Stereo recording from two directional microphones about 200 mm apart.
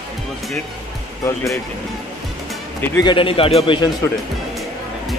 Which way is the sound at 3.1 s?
25° left (ahead or behind).